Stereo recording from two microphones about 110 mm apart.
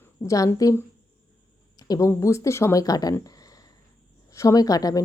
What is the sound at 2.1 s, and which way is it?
Speech, 25° left (ahead or behind).